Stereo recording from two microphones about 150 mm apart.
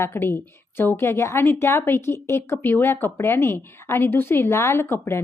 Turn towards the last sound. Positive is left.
turn(degrees=15)  # may be behind; listen again after turning